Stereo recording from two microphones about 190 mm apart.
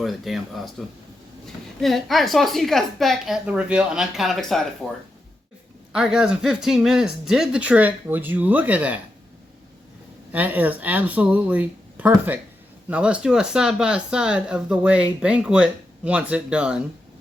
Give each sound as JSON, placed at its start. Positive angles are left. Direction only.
{"t": 0.0, "sound": "speech", "side_deg": 0}
{"t": 1.8, "sound": "speech", "side_deg": 0}
{"t": 10.3, "sound": "speech", "side_deg": -10}